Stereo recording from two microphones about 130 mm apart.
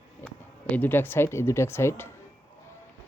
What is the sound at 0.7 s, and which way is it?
Speech, 15° left (ahead or behind).